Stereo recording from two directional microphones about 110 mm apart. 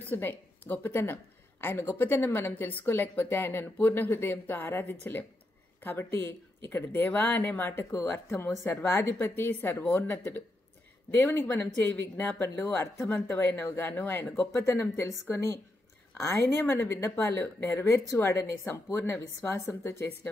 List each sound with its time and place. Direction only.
0.1 s speech: 20° left (ahead or behind)
16.3 s speech: 20° left (ahead or behind)